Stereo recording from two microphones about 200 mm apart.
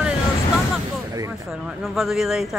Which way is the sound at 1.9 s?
Centre (ahead or behind).